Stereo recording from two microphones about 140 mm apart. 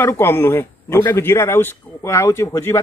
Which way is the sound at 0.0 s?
15° left (ahead or behind).